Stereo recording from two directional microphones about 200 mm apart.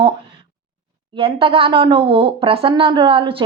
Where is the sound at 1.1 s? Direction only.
25° right (ahead or behind).